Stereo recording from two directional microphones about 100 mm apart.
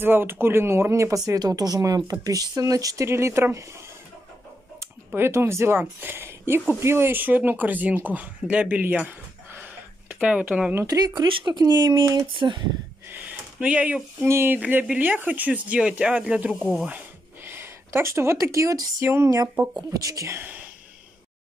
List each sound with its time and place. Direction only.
0.0 s speech: 20° right (ahead or behind)
10.9 s speech: 40° right (ahead or behind)
13.1 s a sound: 15° right (ahead or behind)
14.2 s speech: 25° right (ahead or behind)